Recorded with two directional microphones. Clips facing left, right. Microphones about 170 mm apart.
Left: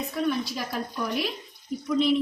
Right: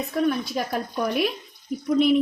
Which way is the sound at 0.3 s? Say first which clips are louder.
Right 3 dB; 50° right (ahead or behind).